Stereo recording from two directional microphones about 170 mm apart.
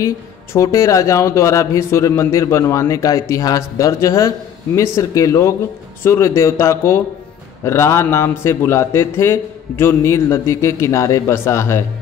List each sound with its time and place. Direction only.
0.0 s speech: 20° left (ahead or behind)